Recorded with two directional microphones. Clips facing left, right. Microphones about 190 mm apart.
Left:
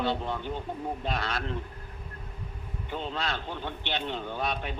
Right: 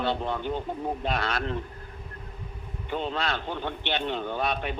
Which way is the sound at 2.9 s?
65° right (ahead or behind).